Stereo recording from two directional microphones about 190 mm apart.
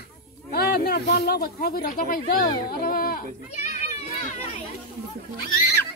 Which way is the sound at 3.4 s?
35° left (ahead or behind).